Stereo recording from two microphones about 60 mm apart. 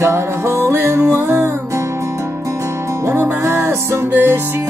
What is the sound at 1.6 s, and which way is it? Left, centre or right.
Music, right.